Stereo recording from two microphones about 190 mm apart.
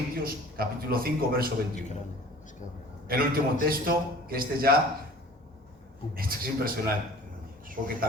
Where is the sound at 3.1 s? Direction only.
50° right (ahead or behind).